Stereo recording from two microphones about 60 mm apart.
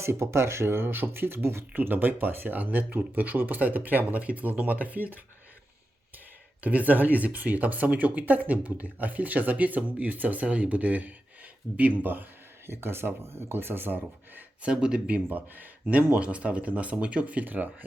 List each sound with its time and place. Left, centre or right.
0.0 s speech: right
6.6 s speech: right
12.6 s speech: right
14.7 s speech: centre